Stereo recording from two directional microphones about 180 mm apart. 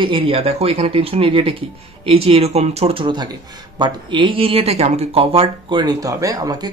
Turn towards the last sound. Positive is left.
turn(degrees=-20)  # may be behind; listen again after turning